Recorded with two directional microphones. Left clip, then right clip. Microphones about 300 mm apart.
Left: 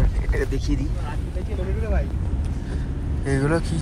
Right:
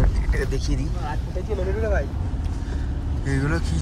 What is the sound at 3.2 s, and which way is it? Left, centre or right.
Speech, centre.